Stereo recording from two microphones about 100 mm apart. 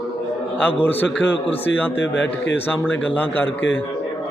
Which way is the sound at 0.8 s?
20° left (ahead or behind).